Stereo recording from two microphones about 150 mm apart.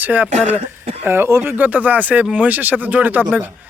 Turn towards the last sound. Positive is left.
turn(degrees=-10)  # may be behind; listen again after turning